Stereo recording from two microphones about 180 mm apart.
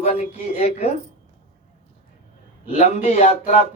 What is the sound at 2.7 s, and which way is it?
Speech, 40° left (ahead or behind).